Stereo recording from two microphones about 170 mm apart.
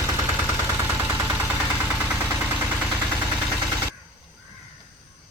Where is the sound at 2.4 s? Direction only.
10° right (ahead or behind).